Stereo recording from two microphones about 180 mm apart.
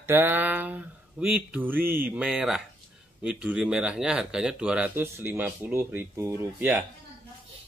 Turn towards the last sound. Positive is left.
turn(degrees=-10)  # may be behind; listen again after turning